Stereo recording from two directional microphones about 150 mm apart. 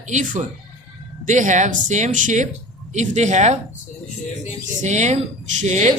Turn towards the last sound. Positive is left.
turn(degrees=-50)  # may be behind; listen again after turning